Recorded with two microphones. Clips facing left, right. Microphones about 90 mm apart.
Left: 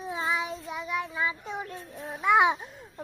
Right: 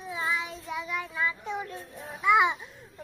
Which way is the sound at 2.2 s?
40° left (ahead or behind).